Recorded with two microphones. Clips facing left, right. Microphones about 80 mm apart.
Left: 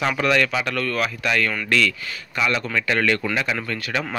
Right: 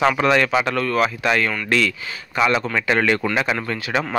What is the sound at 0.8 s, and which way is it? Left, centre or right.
Speech, centre.